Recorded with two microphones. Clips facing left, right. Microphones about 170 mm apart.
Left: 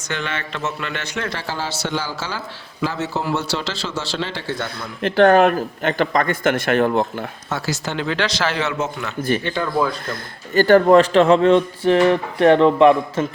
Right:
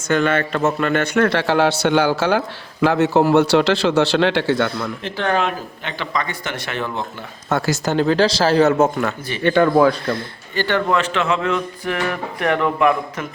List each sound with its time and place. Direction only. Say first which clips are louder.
0.1 s a man's voice: right 9 dB; 50° right (ahead or behind); by 4.9 s 70° right (ahead or behind)
5.0 s speech: left 9 dB; 55° left (ahead or behind)
7.5 s speech: right 6 dB; 50° right (ahead or behind)
8.8 s a man's voice: right 8 dB; 55° right (ahead or behind)
9.4 s a man's voice: right 7 dB; 65° right (ahead or behind)
10.5 s a man's voice: left 8 dB; 40° left (ahead or behind)